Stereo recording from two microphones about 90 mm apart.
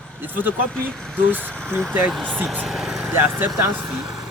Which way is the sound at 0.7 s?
10° left (ahead or behind).